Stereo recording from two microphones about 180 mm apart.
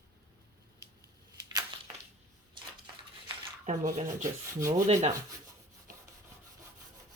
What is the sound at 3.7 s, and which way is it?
Speech, 45° right (ahead or behind).